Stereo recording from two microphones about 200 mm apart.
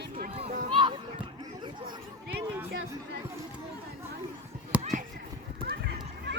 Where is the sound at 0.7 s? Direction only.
25° right (ahead or behind).